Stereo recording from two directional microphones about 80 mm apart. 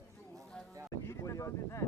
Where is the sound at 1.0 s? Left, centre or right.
Left.